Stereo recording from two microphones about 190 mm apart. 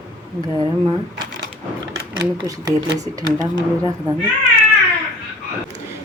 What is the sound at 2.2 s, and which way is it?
Speech, 20° right (ahead or behind).